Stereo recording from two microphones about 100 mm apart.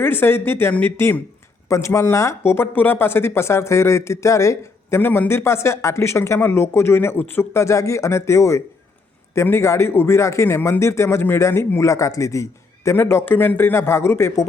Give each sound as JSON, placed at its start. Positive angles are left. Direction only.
{"t": 0.0, "sound": "speech", "side_deg": 20}